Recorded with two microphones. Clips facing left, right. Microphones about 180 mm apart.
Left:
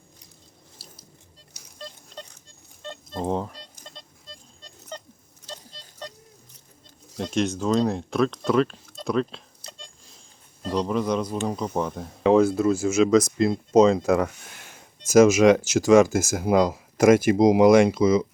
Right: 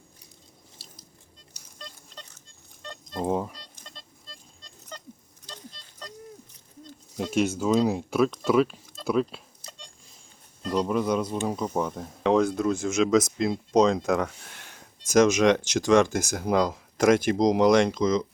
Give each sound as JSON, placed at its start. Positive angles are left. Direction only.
{"t": 3.2, "sound": "speech", "side_deg": -5}
{"t": 5.7, "sound": "music", "side_deg": 35}
{"t": 7.2, "sound": "speech", "side_deg": -5}
{"t": 10.8, "sound": "speech", "side_deg": -5}